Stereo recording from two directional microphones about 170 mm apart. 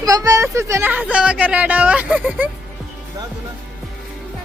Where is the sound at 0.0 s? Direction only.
20° right (ahead or behind).